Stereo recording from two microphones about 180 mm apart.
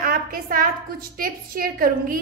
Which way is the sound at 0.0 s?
50° right (ahead or behind).